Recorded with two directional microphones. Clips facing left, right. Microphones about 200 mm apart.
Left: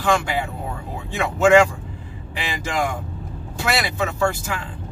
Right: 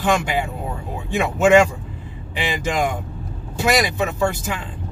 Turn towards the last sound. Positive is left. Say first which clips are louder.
# right 1 dB
turn(degrees=-20)  # may be behind; listen again after turning